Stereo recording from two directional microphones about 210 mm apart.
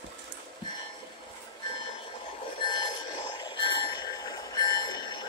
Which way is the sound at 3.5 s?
20° left (ahead or behind).